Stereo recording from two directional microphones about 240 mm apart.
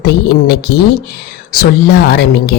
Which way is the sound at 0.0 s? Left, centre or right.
Left.